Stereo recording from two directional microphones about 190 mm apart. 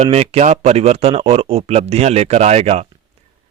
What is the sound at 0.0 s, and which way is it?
Speech, 30° right (ahead or behind).